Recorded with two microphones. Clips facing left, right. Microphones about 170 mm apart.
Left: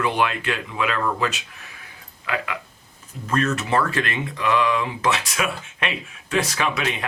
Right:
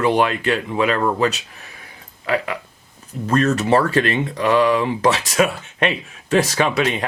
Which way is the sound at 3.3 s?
35° right (ahead or behind).